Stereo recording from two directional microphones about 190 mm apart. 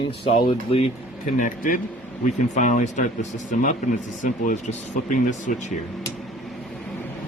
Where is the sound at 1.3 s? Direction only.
45° left (ahead or behind).